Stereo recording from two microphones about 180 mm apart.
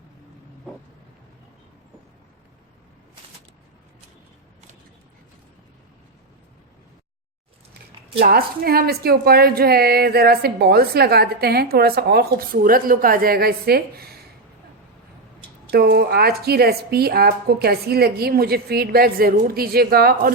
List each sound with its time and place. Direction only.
8.2 s a woman's voice: 55° right (ahead or behind)
15.7 s a woman's voice: 60° right (ahead or behind)